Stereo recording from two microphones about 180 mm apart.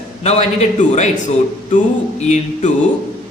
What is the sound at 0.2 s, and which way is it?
A man's voice, 40° left (ahead or behind).